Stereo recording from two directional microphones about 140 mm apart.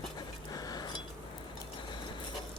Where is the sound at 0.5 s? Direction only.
30° left (ahead or behind).